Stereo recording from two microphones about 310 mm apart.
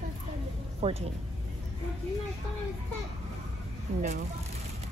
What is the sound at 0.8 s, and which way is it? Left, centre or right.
Speech, centre.